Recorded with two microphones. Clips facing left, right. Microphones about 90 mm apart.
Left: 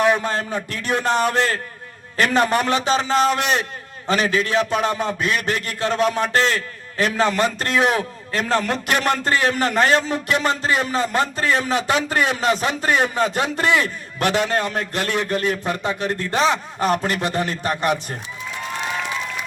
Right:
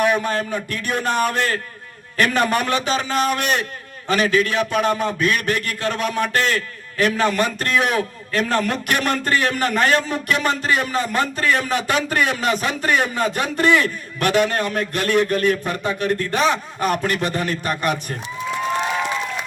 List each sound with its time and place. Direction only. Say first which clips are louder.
0.0 s a man's voice: even; 25° left (ahead or behind)